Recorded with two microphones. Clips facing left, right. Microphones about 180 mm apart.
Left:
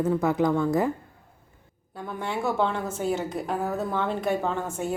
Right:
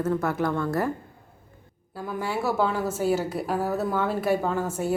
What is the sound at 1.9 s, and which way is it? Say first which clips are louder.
A woman's voice: right 2 dB; 5° right (ahead or behind).